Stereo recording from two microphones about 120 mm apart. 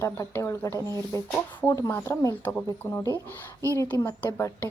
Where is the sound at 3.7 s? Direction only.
15° left (ahead or behind).